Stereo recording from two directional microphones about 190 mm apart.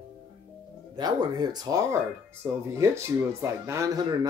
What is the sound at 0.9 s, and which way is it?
Speech, 20° right (ahead or behind).